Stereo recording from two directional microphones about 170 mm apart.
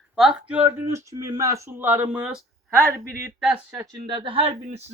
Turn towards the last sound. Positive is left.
turn(degrees=-40)  # may be behind; listen again after turning